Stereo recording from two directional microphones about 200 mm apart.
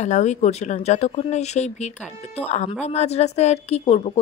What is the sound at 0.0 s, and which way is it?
Speech, 35° left (ahead or behind).